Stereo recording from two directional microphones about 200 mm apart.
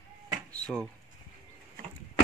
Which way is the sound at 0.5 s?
5° left (ahead or behind).